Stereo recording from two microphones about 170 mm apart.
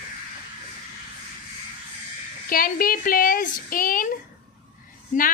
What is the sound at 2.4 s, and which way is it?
Speech, 55° left (ahead or behind).